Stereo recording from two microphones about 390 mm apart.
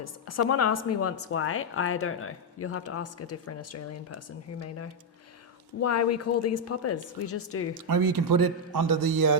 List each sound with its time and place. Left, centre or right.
0.0 s a woman's voice: left
5.8 s a woman's voice: left
7.9 s a man's voice: right